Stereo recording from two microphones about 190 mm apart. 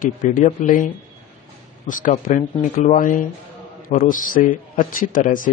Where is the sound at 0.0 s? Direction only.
45° left (ahead or behind).